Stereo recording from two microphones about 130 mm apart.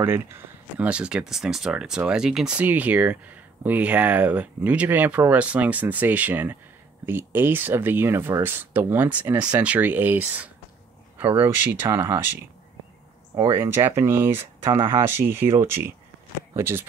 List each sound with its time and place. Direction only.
0.0 s speech: 15° right (ahead or behind)
13.6 s speech: 20° right (ahead or behind)